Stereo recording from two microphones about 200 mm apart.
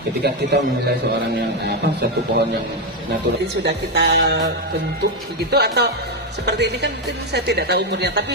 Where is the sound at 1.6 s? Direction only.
55° right (ahead or behind).